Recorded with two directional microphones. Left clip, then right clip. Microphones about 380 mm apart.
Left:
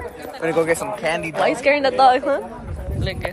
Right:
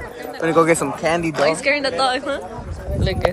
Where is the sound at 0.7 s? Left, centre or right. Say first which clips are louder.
Right 3 dB; centre.